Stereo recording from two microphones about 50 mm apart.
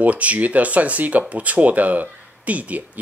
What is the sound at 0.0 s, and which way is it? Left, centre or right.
Speech, right.